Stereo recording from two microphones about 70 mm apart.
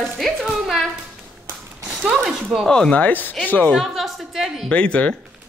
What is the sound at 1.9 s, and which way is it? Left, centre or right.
Speech, centre.